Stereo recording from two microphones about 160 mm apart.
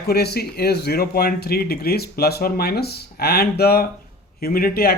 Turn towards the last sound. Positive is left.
turn(degrees=70)  # may be behind; listen again after turning